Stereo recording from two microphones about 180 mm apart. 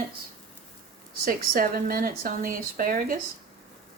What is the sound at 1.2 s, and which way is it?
Speech, 55° right (ahead or behind).